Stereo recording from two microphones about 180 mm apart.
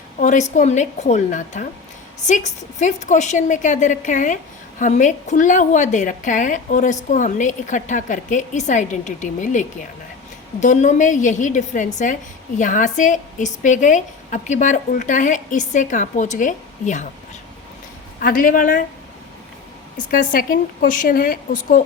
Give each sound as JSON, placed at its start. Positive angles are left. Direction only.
{"t": 0.2, "sound": "a woman's voice", "side_deg": 40}
{"t": 18.2, "sound": "a woman's voice", "side_deg": 50}
{"t": 20.1, "sound": "a woman's voice", "side_deg": 50}